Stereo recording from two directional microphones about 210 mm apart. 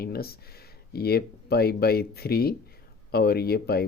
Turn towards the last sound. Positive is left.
turn(degrees=50)  # may be behind; listen again after turning